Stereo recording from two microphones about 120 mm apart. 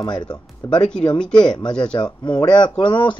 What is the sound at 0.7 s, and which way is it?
Speech, 5° left (ahead or behind).